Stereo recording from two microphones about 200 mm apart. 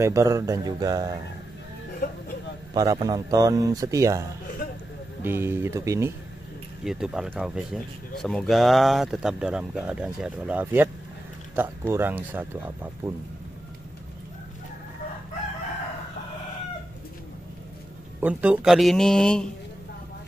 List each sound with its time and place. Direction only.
0.0 s speech: 15° right (ahead or behind)
2.7 s speech: 20° right (ahead or behind)
6.8 s speech: 5° right (ahead or behind)
18.2 s speech: 5° right (ahead or behind)